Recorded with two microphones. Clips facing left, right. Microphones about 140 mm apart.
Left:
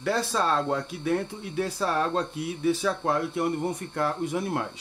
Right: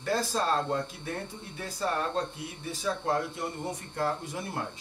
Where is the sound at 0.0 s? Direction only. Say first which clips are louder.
Left 3 dB; 70° left (ahead or behind).